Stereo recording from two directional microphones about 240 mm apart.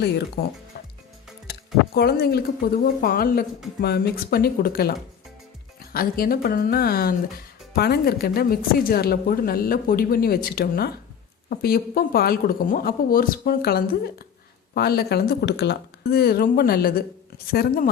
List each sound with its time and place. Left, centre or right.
0.4 s speech: left
2.0 s speech: left